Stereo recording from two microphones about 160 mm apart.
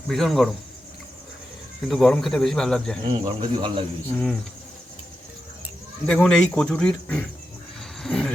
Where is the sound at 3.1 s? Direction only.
40° right (ahead or behind).